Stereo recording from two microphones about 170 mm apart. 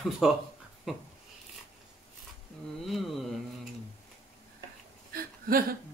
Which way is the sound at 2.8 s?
Centre (ahead or behind).